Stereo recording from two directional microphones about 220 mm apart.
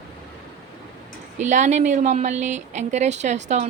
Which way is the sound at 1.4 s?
35° right (ahead or behind).